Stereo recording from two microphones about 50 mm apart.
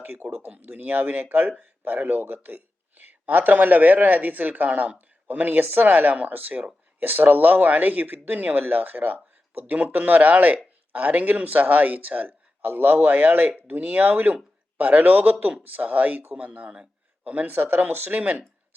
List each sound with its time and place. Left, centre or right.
0.0 s speech: right
0.3 s speech: right
0.5 s speech: right
17.5 s speech: right